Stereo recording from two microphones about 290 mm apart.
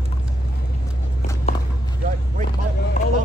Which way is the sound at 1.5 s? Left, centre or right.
Left.